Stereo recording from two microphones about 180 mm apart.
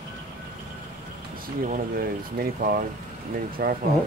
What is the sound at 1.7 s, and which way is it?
Speech, 55° right (ahead or behind).